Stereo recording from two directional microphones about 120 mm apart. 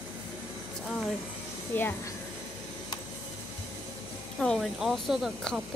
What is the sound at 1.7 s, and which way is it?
Speech, 15° left (ahead or behind).